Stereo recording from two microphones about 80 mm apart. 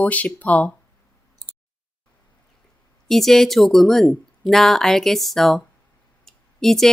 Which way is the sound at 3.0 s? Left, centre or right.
Centre.